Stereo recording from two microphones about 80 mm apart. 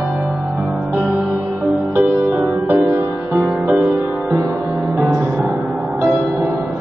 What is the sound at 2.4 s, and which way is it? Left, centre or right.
Music, right.